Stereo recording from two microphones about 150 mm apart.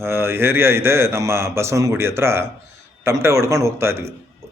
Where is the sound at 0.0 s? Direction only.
15° right (ahead or behind).